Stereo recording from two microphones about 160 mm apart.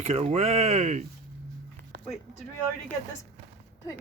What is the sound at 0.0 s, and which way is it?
Speech, 40° right (ahead or behind).